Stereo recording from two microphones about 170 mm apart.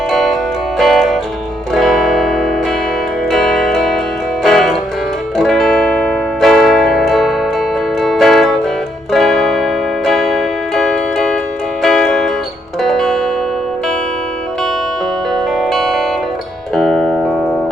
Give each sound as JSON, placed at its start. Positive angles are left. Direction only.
{"t": 0.1, "sound": "music", "side_deg": 0}
{"t": 15.5, "sound": "music", "side_deg": 0}